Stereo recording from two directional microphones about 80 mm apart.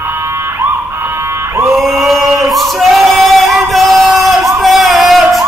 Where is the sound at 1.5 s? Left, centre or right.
Right.